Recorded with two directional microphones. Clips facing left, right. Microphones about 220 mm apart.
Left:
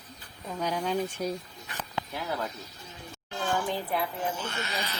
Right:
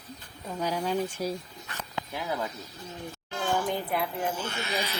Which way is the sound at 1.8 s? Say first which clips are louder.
Even; 10° right (ahead or behind).